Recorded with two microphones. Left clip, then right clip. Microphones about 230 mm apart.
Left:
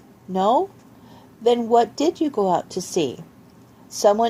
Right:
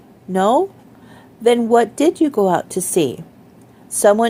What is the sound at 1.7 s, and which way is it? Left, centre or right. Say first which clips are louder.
A woman's voice: right 4 dB; right.